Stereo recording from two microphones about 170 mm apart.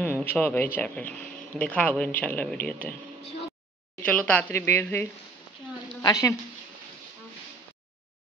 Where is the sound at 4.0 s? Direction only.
10° left (ahead or behind).